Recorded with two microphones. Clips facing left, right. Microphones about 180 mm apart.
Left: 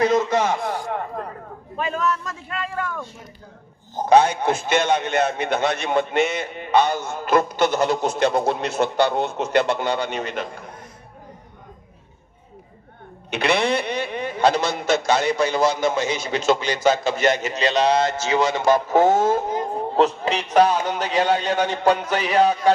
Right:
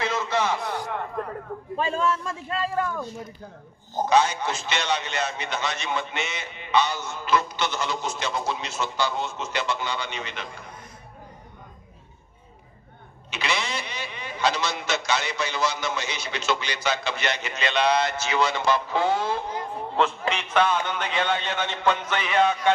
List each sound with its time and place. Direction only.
0.0 s speech: 45° left (ahead or behind)
0.6 s a sound: 35° left (ahead or behind)
1.8 s a man's voice: 30° right (ahead or behind)
4.1 s a man's voice: 55° left (ahead or behind)
13.3 s a man's voice: 60° left (ahead or behind); by 22.7 s 35° left (ahead or behind)